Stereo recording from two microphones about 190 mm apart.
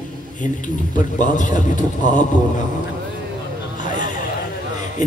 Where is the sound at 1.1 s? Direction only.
40° left (ahead or behind).